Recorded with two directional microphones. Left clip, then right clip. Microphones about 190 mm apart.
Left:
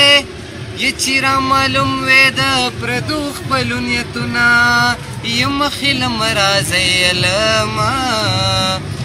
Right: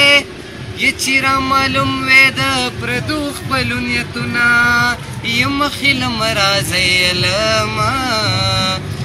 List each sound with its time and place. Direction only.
0.7 s speech: 15° left (ahead or behind)